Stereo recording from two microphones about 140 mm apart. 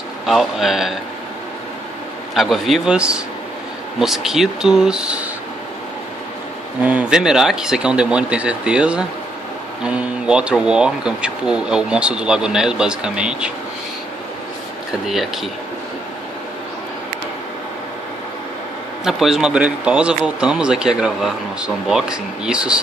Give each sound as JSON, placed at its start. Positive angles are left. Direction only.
{"t": 0.3, "sound": "speech", "side_deg": 0}
{"t": 2.3, "sound": "speech", "side_deg": 0}
{"t": 6.8, "sound": "speech", "side_deg": -10}
{"t": 15.0, "sound": "speech", "side_deg": 0}
{"t": 19.0, "sound": "speech", "side_deg": 0}